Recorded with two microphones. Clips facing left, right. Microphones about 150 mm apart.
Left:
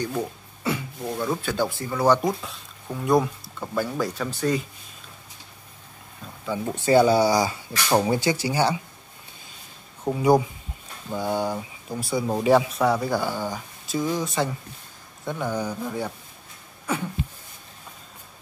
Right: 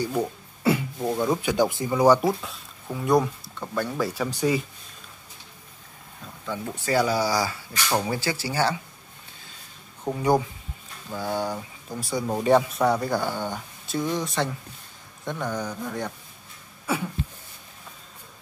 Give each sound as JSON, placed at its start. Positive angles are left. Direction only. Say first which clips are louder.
{"t": 0.0, "sound": "speech", "louder": "right 2 dB", "side_deg": -10}
{"t": 2.4, "sound": "speech", "louder": "even", "side_deg": 0}
{"t": 4.1, "sound": "speech", "louder": "right 1 dB", "side_deg": -10}
{"t": 6.6, "sound": "speech", "louder": "left 6 dB", "side_deg": 25}
{"t": 10.0, "sound": "mantra", "louder": "left 3 dB", "side_deg": 10}
{"t": 11.1, "sound": "speech", "louder": "left 2 dB", "side_deg": 15}
{"t": 15.2, "sound": "mantra", "louder": "left 2 dB", "side_deg": 5}